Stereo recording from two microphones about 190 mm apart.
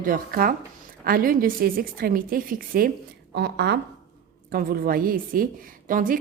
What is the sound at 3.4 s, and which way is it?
A woman's voice, 60° right (ahead or behind).